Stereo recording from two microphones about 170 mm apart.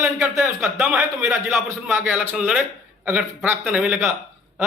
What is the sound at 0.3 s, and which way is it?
A man's voice, 5° right (ahead or behind).